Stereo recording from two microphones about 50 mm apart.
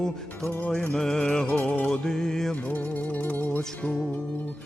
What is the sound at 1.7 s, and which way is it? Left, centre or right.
Music, left.